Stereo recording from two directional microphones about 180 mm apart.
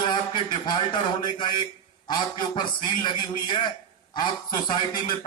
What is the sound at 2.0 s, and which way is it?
A man's voice, 25° left (ahead or behind).